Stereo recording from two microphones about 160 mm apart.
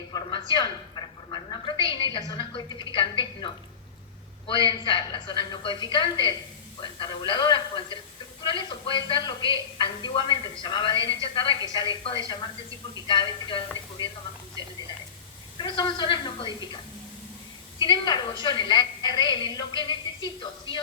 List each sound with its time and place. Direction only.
0.1 s a sound: 30° left (ahead or behind)
2.1 s a woman's voice: 25° left (ahead or behind)
13.1 s a woman's voice: 30° left (ahead or behind)
15.5 s a woman's voice: 30° left (ahead or behind)